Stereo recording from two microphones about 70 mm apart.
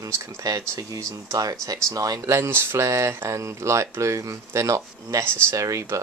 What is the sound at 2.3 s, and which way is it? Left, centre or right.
Speech, right.